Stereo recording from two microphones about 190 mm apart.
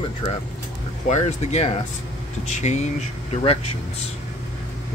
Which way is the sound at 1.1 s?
35° left (ahead or behind).